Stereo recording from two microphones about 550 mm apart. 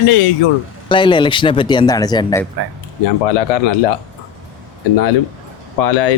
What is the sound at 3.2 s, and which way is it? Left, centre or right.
Speech, left.